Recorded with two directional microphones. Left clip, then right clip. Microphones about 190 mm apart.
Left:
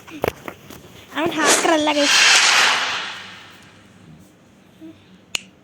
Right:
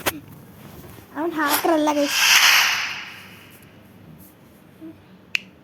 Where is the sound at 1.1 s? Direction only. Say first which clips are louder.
Left 3 dB; 25° left (ahead or behind).